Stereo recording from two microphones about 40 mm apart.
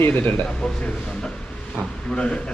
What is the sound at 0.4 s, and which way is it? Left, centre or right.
Speech, left.